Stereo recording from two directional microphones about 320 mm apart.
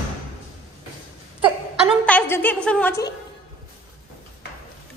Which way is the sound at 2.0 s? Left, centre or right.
Centre.